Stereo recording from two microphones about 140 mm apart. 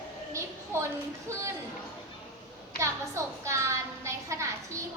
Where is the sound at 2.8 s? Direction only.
20° right (ahead or behind).